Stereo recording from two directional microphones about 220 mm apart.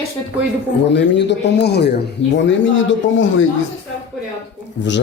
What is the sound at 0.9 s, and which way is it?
A man's voice, 50° left (ahead or behind).